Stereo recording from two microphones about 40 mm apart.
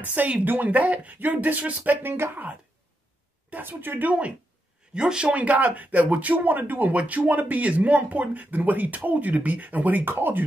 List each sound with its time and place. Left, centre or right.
0.0 s speech: right
2.0 s speech: right
3.6 s a woman's voice: right
4.9 s speech: right
5.3 s speech: right
7.0 s speech: right